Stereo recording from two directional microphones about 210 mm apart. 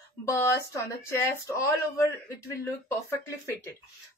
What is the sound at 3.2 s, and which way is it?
Speech, 10° left (ahead or behind).